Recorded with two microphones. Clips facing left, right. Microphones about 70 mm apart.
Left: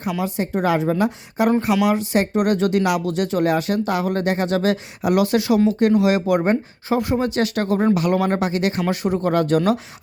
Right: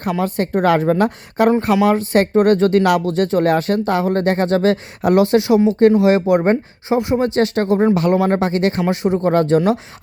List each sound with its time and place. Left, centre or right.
0.0 s speech: right
1.6 s speech: right